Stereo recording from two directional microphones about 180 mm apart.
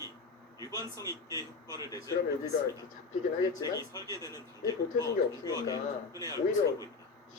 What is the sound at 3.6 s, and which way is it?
Speech, 20° left (ahead or behind).